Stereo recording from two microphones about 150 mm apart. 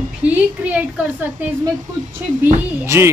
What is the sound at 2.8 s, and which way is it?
Speech, 15° right (ahead or behind).